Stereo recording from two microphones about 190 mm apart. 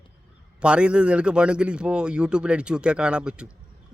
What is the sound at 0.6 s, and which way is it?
A man's voice, 5° right (ahead or behind).